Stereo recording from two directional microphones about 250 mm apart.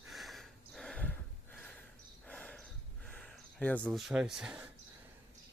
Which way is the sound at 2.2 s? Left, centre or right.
Centre.